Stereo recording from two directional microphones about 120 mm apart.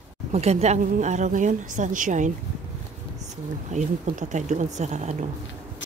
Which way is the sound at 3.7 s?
80° right.